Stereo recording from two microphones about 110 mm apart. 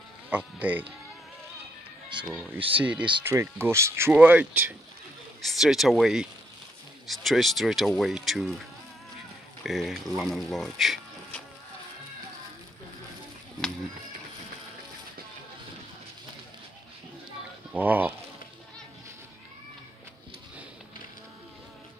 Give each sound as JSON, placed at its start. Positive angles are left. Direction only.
{"t": 0.3, "sound": "speech", "side_deg": -15}
{"t": 2.1, "sound": "speech", "side_deg": -45}
{"t": 2.8, "sound": "speech", "side_deg": -10}
{"t": 3.3, "sound": "speech", "side_deg": -20}
{"t": 4.1, "sound": "speech", "side_deg": -10}
{"t": 5.4, "sound": "speech", "side_deg": 0}
{"t": 9.6, "sound": "speech", "side_deg": 0}
{"t": 17.7, "sound": "speech", "side_deg": -15}